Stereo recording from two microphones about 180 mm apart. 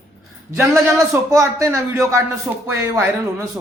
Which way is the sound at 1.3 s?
15° right (ahead or behind).